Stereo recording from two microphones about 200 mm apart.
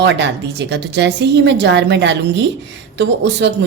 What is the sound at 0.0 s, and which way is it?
Speech, 60° right (ahead or behind).